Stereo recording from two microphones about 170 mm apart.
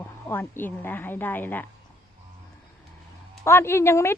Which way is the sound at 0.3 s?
10° left (ahead or behind).